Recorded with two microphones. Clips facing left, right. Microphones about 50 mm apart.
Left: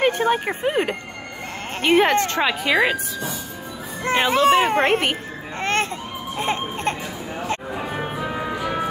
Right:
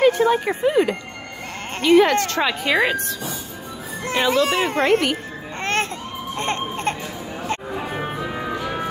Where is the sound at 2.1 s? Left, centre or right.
Left.